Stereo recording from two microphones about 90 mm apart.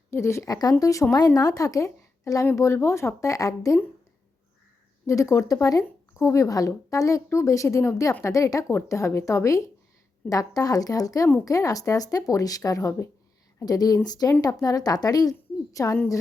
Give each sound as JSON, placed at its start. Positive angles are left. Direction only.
{"t": 0.1, "sound": "a woman's voice", "side_deg": 30}
{"t": 5.0, "sound": "a woman's voice", "side_deg": 35}